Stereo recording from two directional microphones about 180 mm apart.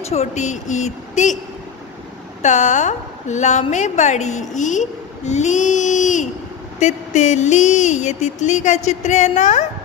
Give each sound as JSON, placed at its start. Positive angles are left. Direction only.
{"t": 0.0, "sound": "a woman's voice", "side_deg": 35}
{"t": 2.4, "sound": "a woman's voice", "side_deg": 40}